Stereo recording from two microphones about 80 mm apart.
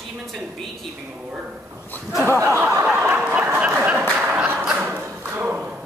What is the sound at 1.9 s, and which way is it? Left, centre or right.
Speech, left.